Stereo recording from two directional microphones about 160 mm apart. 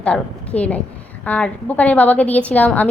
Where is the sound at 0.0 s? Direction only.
10° left (ahead or behind).